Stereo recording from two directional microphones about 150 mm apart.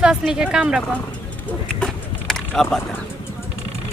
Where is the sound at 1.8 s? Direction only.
5° left (ahead or behind).